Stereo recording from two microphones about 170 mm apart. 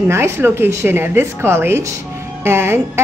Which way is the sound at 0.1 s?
15° right (ahead or behind).